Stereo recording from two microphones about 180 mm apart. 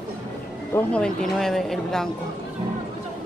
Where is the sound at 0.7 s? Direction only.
5° left (ahead or behind).